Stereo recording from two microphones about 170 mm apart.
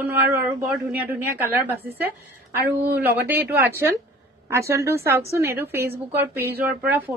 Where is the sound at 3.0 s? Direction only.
10° right (ahead or behind).